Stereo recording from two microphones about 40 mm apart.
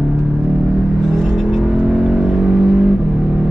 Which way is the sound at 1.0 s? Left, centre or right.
Centre.